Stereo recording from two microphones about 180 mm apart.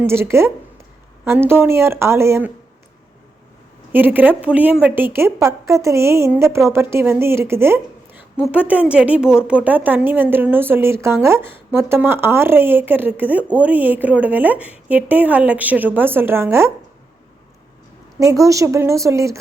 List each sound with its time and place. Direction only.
0.0 s speech: 15° right (ahead or behind)
3.9 s speech: 10° right (ahead or behind)
18.2 s speech: 15° right (ahead or behind)